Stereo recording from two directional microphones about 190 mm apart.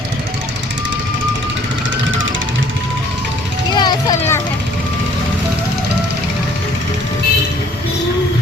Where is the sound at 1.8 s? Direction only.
80° right.